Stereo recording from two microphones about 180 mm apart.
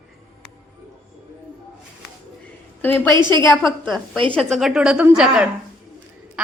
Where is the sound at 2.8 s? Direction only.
10° left (ahead or behind).